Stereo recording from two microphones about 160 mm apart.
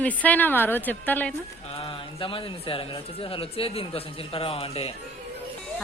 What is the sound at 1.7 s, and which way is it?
A man's voice, 35° left (ahead or behind).